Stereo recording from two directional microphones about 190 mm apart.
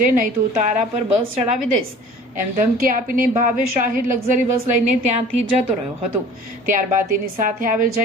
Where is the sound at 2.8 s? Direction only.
50° right (ahead or behind).